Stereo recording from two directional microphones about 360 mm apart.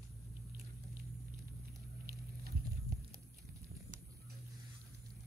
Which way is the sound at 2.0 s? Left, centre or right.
Right.